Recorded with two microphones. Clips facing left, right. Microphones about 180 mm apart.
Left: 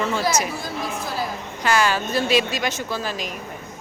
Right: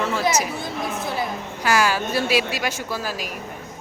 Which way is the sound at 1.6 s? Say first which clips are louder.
Even; 10° right (ahead or behind).